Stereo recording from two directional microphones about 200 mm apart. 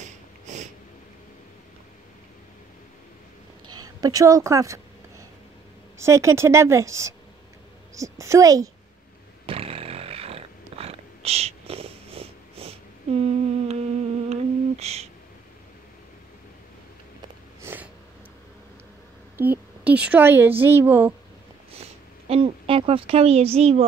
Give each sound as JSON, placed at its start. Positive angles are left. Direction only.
{"t": 0.0, "sound": "a sound", "side_deg": -35}
{"t": 3.8, "sound": "speech", "side_deg": -20}
{"t": 5.9, "sound": "a woman's voice", "side_deg": -15}
{"t": 9.5, "sound": "a sound", "side_deg": -30}
{"t": 13.2, "sound": "humming", "side_deg": -35}
{"t": 14.3, "sound": "a sound", "side_deg": -30}
{"t": 17.6, "sound": "snort", "side_deg": -10}
{"t": 19.3, "sound": "a woman's voice", "side_deg": -10}
{"t": 22.3, "sound": "speech", "side_deg": -30}